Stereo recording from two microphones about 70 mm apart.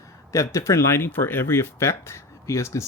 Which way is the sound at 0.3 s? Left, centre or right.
Left.